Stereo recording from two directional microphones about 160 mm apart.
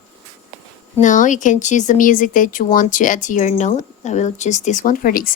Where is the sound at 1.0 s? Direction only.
50° left (ahead or behind).